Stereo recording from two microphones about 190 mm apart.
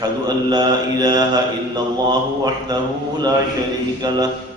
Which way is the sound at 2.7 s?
20° right (ahead or behind).